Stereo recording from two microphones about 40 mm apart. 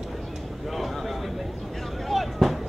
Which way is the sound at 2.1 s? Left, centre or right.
Centre.